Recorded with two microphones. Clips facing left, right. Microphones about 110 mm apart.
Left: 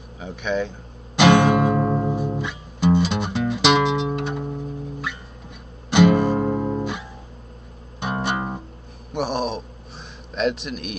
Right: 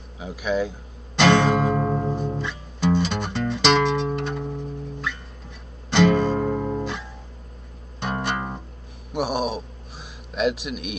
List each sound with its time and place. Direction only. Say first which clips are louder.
0.2 s speech: even; 5° right (ahead or behind)
1.1 s music: left 2 dB; 10° left (ahead or behind)
5.9 s guitar: left 2 dB; 10° left (ahead or behind)
8.0 s music: left 2 dB; 10° left (ahead or behind)
9.1 s a sound: even; centre (ahead or behind)